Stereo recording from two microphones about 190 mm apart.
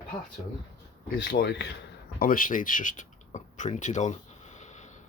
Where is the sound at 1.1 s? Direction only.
55° left (ahead or behind).